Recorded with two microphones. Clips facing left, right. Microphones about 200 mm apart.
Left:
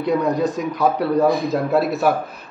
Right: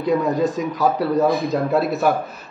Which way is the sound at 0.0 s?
Centre (ahead or behind).